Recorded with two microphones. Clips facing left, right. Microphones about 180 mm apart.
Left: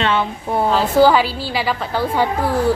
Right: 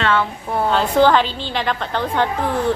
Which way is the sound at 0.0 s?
20° left (ahead or behind).